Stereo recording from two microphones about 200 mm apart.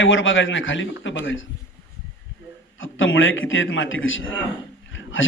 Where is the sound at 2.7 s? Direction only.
75° left (ahead or behind).